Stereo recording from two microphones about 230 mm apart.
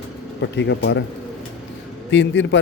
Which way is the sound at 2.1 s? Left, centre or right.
Left.